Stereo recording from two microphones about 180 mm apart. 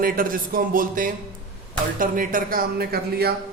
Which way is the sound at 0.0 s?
50° right (ahead or behind).